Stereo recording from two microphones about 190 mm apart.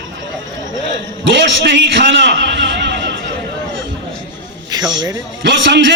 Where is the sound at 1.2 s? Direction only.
70° right (ahead or behind).